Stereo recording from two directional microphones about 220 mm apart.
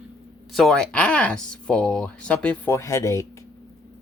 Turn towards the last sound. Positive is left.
turn(degrees=15)  # may be behind; listen again after turning